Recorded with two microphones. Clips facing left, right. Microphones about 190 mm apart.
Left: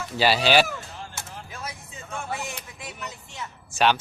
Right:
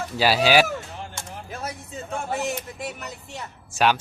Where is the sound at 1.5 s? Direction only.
40° right (ahead or behind).